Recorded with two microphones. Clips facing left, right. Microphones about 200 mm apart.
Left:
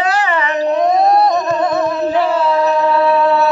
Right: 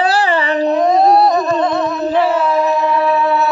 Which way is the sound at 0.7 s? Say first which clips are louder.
Right 1 dB; centre (ahead or behind).